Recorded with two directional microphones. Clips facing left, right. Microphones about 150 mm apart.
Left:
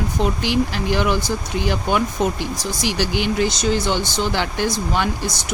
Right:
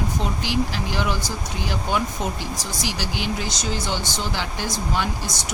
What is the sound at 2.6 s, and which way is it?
Speech, 60° left (ahead or behind).